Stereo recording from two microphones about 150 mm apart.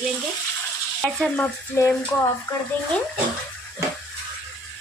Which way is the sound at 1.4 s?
20° left (ahead or behind).